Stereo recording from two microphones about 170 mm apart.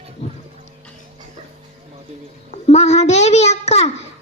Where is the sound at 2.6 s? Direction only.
40° left (ahead or behind).